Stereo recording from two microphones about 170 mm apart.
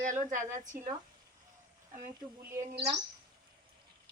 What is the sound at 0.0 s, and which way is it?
Speech, 50° right (ahead or behind).